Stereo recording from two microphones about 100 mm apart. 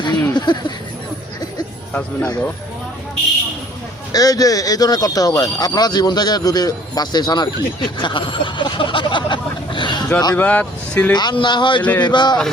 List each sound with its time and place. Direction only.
0.0 s a sound: 45° left (ahead or behind)
1.9 s speech: 15° left (ahead or behind)
4.1 s speech: 40° left (ahead or behind)
10.3 s speech: 15° left (ahead or behind)
11.1 s speech: 45° left (ahead or behind)
11.8 s speech: 15° left (ahead or behind)
12.0 s speech: 50° left (ahead or behind)